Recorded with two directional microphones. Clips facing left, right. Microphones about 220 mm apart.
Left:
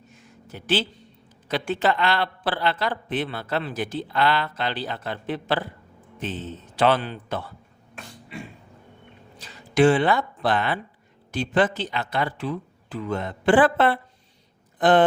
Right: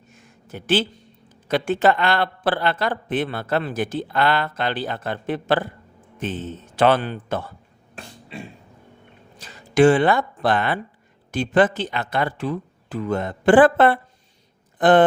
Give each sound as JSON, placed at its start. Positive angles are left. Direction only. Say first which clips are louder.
{"t": 0.1, "sound": "a sound", "louder": "right 4 dB", "side_deg": -50}
{"t": 1.5, "sound": "speech", "louder": "right 5 dB", "side_deg": -50}
{"t": 9.4, "sound": "speech", "louder": "right 3 dB", "side_deg": -50}